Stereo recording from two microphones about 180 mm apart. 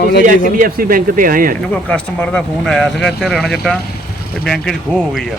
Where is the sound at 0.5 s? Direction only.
50° right (ahead or behind).